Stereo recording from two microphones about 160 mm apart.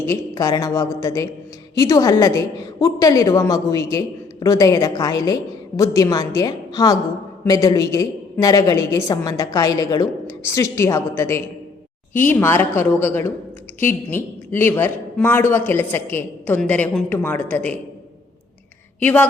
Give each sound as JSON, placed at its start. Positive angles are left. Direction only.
{"t": 0.0, "sound": "a woman's voice", "side_deg": 20}
{"t": 19.0, "sound": "a man's voice", "side_deg": 10}